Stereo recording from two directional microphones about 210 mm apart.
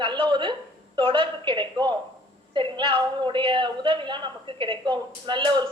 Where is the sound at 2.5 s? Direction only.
25° right (ahead or behind).